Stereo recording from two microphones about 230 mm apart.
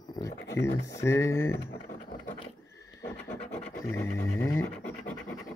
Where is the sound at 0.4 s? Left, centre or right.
Left.